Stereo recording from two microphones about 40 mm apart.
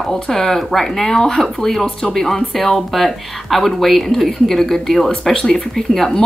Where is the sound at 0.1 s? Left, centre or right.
Centre.